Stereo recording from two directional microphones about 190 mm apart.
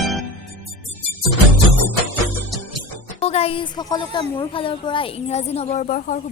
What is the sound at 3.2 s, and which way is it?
A child's voice, 30° left (ahead or behind).